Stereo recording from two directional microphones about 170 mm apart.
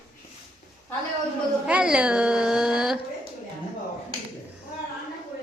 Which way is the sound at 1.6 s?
5° right (ahead or behind).